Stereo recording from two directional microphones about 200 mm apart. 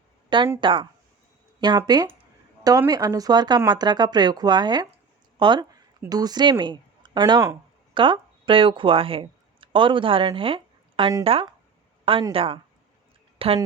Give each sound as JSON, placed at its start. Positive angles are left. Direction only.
{"t": 0.3, "sound": "speech", "side_deg": -25}